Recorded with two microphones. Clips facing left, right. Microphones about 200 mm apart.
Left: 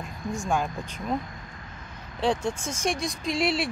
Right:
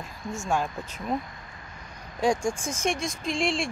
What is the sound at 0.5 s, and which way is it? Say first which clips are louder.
Speech: right 1 dB; centre (ahead or behind).